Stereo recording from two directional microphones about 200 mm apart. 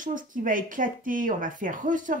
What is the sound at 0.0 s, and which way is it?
Speech, 40° right (ahead or behind).